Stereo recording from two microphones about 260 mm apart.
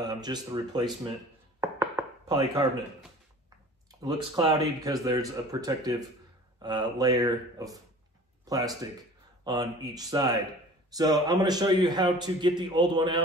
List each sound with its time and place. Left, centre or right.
0.0 s speech: centre
1.6 s knock: centre
4.0 s a man's voice: centre